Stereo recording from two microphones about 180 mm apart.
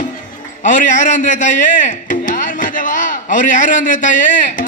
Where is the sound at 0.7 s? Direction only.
45° left (ahead or behind).